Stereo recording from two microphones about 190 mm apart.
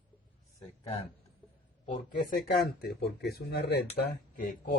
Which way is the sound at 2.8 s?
60° left (ahead or behind).